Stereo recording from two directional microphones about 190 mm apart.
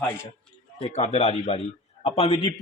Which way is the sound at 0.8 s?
35° left (ahead or behind).